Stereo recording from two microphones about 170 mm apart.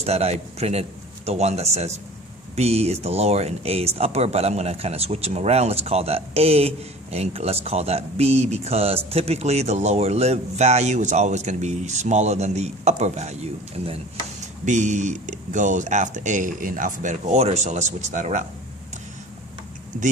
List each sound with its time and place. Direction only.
0.0 s speech: 40° right (ahead or behind)